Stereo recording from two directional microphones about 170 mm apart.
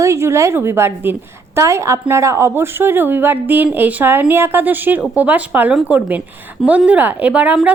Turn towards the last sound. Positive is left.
turn(degrees=-10)  # may be behind; listen again after turning